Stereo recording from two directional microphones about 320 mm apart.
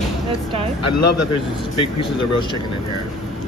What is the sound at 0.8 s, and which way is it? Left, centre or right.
Speech, left.